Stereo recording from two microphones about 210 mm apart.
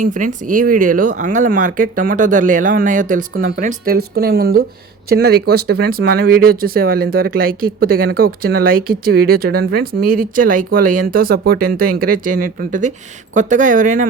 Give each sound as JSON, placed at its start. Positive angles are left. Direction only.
{"t": 0.0, "sound": "speech", "side_deg": -40}